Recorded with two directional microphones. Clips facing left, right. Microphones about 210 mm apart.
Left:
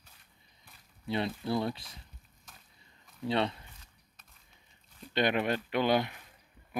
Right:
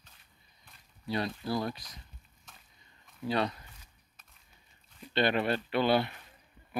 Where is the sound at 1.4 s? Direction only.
25° left (ahead or behind).